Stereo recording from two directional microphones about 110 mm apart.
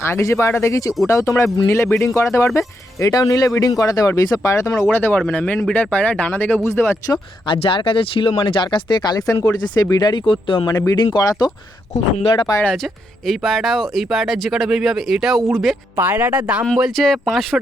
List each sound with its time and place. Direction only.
0.0 s speech: 25° left (ahead or behind)
7.1 s speech: 50° left (ahead or behind)
10.7 s speech: 35° left (ahead or behind)
12.1 s speech: 60° left (ahead or behind)
12.6 s speech: centre (ahead or behind)
16.0 s speech: 15° right (ahead or behind)
16.7 s speech: centre (ahead or behind)